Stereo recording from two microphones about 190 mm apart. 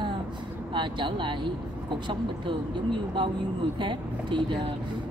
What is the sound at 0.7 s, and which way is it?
Speech, 25° right (ahead or behind).